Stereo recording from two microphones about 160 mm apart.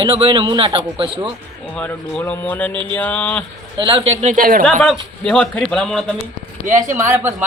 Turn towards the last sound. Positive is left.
turn(degrees=-15)  # may be behind; listen again after turning